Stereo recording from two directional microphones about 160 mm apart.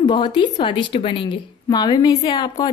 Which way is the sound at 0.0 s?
30° left (ahead or behind).